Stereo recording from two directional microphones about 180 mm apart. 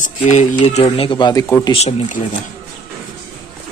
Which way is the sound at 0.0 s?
40° left (ahead or behind).